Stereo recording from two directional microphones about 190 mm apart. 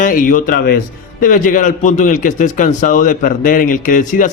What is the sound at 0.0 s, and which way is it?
A man's voice, 45° left (ahead or behind).